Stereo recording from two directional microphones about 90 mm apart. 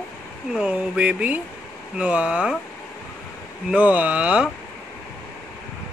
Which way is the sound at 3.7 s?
15° right (ahead or behind).